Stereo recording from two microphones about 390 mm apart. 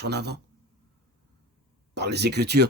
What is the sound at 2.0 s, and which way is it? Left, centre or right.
Speech, right.